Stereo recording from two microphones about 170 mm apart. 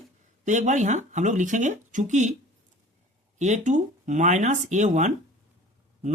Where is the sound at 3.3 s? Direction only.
45° right (ahead or behind).